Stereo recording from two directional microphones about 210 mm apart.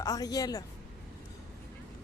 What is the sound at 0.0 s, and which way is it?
Speech, 15° left (ahead or behind).